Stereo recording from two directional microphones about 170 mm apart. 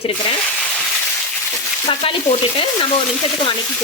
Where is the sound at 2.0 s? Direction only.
35° left (ahead or behind).